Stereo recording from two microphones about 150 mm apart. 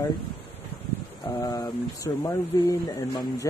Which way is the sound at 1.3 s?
25° left (ahead or behind).